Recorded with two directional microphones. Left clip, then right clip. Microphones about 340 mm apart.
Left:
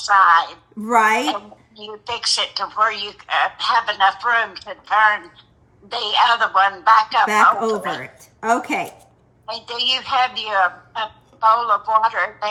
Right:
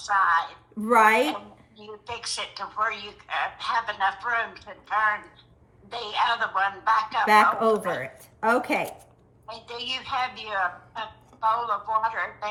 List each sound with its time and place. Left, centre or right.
0.0 s a woman's voice: left
0.9 s speech: centre
1.8 s a woman's voice: left
7.6 s speech: centre
9.5 s a woman's voice: left